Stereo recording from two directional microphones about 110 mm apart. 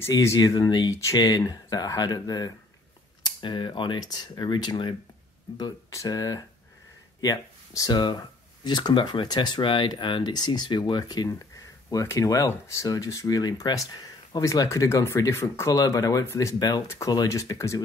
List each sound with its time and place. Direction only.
0.1 s speech: 30° left (ahead or behind)
3.3 s speech: 45° left (ahead or behind)
5.9 s speech: 30° left (ahead or behind)
11.9 s speech: 30° left (ahead or behind)
16.8 s speech: 25° left (ahead or behind)